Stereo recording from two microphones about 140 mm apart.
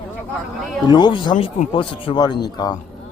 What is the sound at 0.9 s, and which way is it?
Speech, 35° left (ahead or behind).